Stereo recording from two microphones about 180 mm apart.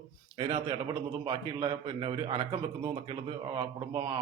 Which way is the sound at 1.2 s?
25° right (ahead or behind).